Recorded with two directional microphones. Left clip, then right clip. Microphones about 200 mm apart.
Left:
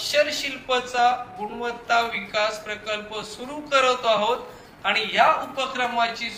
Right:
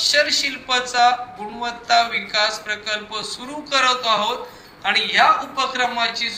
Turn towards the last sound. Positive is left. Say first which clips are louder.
# right 3 dB
turn(degrees=-15)  # may be behind; listen again after turning